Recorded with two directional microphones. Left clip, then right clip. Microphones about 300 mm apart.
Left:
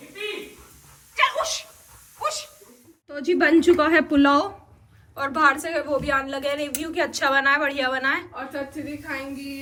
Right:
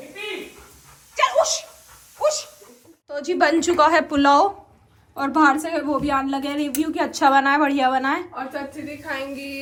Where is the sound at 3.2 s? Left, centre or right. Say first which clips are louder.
Left 1 dB; centre.